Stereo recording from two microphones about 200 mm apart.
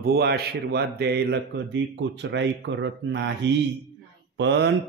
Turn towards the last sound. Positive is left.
turn(degrees=-60)  # may be behind; listen again after turning